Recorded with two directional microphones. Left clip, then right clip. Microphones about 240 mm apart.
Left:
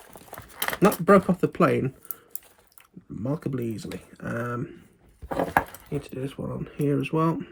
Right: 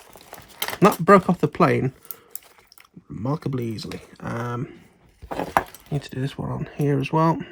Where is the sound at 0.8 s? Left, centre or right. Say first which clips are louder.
Right 4 dB; right.